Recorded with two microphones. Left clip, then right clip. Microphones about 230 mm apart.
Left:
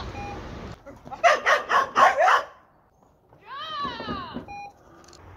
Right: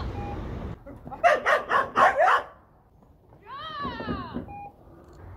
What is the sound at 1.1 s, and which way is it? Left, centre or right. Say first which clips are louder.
Dog: left 2 dB; centre.